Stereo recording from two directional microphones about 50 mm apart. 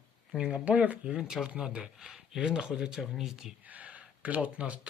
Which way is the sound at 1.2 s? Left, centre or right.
Centre.